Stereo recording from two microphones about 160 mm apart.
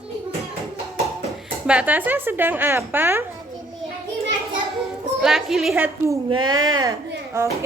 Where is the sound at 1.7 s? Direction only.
10° right (ahead or behind).